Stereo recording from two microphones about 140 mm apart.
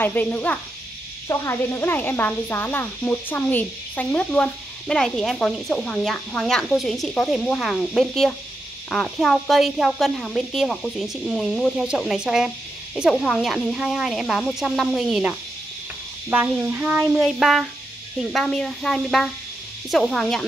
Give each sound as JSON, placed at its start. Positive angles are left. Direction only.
{"t": 0.0, "sound": "speech", "side_deg": 15}